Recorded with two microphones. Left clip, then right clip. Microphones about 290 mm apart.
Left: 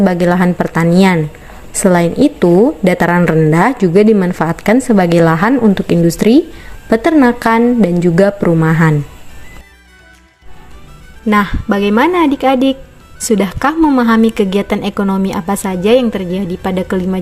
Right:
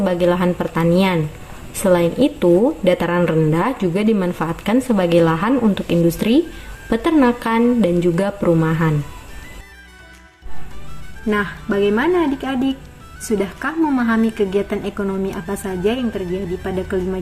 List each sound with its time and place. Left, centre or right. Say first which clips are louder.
0.0 s a woman's voice: left 4 dB; left
11.3 s a woman's voice: left 7 dB; left